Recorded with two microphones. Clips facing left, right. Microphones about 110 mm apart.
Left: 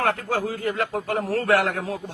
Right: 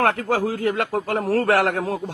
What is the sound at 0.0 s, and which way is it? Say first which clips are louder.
A man's voice: right 4 dB; 85° right.